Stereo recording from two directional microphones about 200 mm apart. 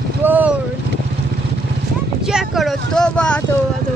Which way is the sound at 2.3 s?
Centre (ahead or behind).